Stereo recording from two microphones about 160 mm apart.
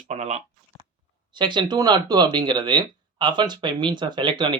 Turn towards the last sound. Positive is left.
turn(degrees=-30)  # may be behind; listen again after turning